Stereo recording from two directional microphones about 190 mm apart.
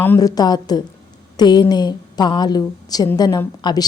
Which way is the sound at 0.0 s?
15° left (ahead or behind).